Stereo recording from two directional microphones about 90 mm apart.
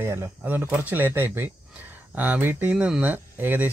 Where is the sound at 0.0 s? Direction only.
25° right (ahead or behind).